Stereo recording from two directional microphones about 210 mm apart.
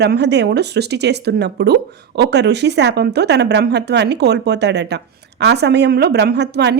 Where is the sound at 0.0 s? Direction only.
55° right (ahead or behind).